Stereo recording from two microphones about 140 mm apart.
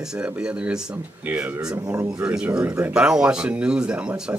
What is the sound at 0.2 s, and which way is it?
Speech, 5° right (ahead or behind).